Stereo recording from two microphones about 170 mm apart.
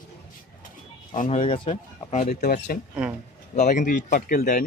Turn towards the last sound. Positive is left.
turn(degrees=50)  # may be behind; listen again after turning